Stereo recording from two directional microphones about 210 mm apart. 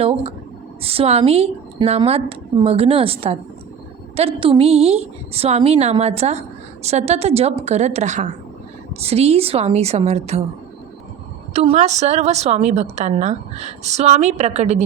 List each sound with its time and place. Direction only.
0.0 s a woman's voice: 25° right (ahead or behind)
11.5 s a woman's voice: 30° right (ahead or behind)